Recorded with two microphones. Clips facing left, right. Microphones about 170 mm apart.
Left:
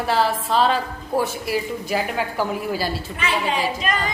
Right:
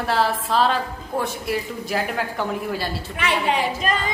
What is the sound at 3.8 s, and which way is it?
Female singing, 40° right (ahead or behind).